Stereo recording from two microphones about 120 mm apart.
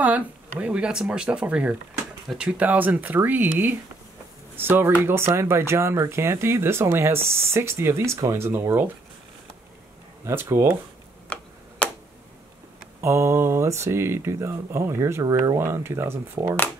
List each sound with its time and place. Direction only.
0.0 s speech: 10° right (ahead or behind)
10.2 s speech: 20° right (ahead or behind)
11.3 s tick-tock: 10° left (ahead or behind)
13.0 s speech: 20° right (ahead or behind)